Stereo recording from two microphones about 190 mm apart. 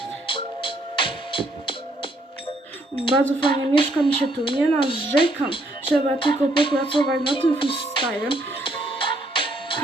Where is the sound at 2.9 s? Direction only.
25° left (ahead or behind).